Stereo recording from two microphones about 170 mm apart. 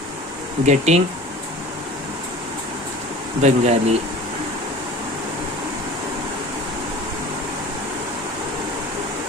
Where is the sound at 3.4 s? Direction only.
40° right (ahead or behind).